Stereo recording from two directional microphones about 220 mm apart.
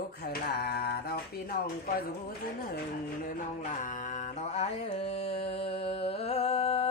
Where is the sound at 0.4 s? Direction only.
45° left (ahead or behind).